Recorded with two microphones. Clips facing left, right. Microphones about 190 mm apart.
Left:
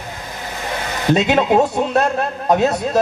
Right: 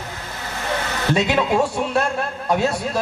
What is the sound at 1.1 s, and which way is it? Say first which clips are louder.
A man's voice: left 5 dB; 20° left (ahead or behind).